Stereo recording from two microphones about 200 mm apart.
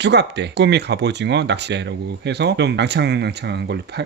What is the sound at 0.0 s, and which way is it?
Speech, 60° right (ahead or behind).